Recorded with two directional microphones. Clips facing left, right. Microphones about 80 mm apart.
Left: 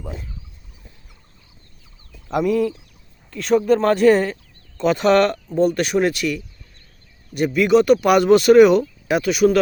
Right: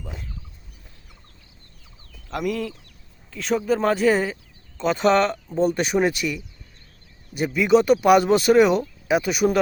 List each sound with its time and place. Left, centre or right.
2.4 s a sound: centre
3.7 s speech: centre
6.0 s speech: centre
7.4 s speech: centre